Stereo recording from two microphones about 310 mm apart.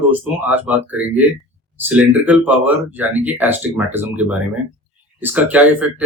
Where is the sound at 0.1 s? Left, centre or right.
Centre.